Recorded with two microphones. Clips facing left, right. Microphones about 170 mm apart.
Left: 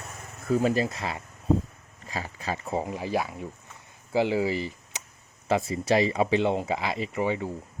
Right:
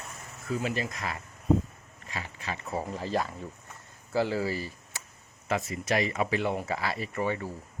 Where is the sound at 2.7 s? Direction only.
15° left (ahead or behind).